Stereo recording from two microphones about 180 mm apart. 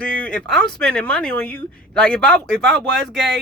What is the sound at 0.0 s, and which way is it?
Speech, 5° left (ahead or behind).